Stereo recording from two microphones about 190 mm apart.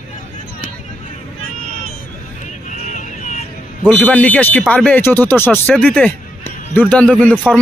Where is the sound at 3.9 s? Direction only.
10° left (ahead or behind).